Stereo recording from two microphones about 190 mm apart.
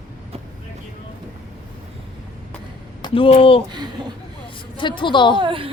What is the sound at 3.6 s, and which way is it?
Speech, 20° right (ahead or behind).